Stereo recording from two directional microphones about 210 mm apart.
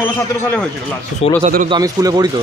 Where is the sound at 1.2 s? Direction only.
30° left (ahead or behind).